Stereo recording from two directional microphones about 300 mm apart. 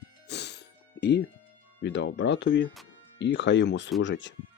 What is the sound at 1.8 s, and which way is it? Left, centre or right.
Speech, left.